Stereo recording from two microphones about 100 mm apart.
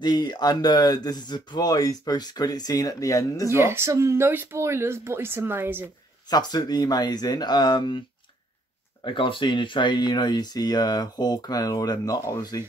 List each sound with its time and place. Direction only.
0.0 s speech: 45° left (ahead or behind)
3.4 s speech: 25° right (ahead or behind)
6.3 s speech: 45° left (ahead or behind)
9.0 s speech: 55° left (ahead or behind); by 12.6 s 40° left (ahead or behind)